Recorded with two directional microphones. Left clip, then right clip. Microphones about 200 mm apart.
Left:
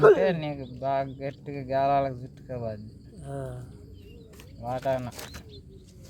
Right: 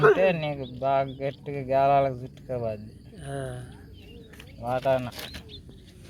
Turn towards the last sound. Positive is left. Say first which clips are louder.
# right 3 dB
turn(degrees=5)  # may be behind; listen again after turning